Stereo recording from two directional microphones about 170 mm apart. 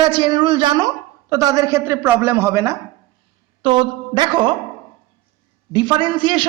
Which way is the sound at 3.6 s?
25° right (ahead or behind).